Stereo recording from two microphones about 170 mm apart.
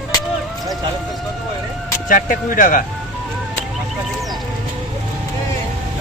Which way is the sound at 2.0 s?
50° left (ahead or behind).